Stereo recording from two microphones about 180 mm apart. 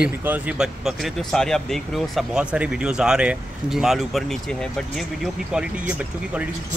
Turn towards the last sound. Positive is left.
turn(degrees=-5)  # may be behind; listen again after turning